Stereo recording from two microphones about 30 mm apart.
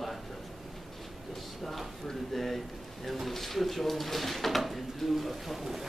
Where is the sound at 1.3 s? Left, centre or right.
Centre.